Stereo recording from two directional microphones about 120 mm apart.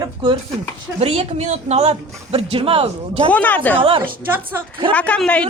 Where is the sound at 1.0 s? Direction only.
65° right (ahead or behind).